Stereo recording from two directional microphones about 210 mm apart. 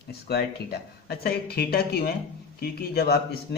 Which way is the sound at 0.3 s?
50° left (ahead or behind).